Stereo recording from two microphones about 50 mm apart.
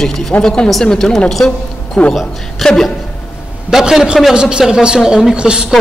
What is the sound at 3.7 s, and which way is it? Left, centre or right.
A woman's voice, centre.